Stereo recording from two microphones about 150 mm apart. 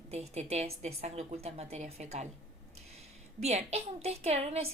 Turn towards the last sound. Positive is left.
turn(degrees=-45)  # may be behind; listen again after turning